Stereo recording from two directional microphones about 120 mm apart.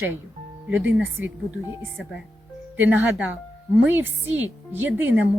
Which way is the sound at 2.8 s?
15° right (ahead or behind).